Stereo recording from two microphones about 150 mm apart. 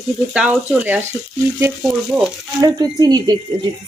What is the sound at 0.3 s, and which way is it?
Speech, 5° right (ahead or behind).